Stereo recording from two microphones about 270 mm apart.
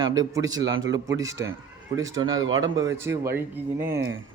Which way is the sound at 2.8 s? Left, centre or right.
Centre.